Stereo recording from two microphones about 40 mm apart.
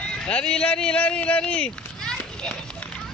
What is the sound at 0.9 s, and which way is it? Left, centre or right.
Speech, left.